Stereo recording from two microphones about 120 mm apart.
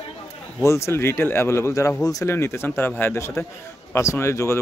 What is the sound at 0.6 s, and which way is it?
Speech, 25° left (ahead or behind).